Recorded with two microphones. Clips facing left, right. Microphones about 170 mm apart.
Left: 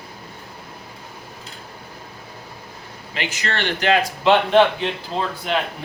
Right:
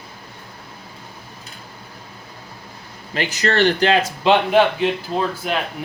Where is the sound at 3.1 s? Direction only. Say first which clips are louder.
Right 6 dB; 40° right (ahead or behind); by 4.3 s 25° right (ahead or behind).